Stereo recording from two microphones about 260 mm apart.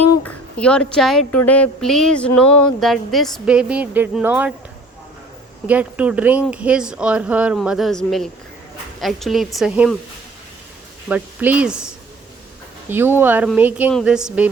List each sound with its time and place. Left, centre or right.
0.3 s speech: centre
2.5 s speech: left
2.8 s speech: centre
5.6 s speech: centre
11.1 s speech: centre
12.9 s speech: centre